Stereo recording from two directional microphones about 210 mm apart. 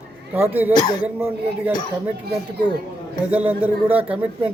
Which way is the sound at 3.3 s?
5° right (ahead or behind).